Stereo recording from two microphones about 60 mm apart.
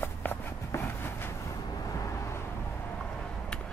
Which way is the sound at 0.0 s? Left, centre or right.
Left.